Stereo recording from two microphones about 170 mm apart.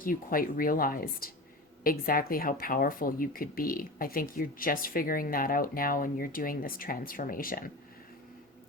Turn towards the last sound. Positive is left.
turn(degrees=55)  # may be behind; listen again after turning